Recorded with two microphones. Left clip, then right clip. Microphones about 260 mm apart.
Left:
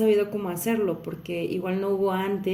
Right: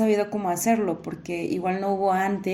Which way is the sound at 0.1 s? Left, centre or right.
Centre.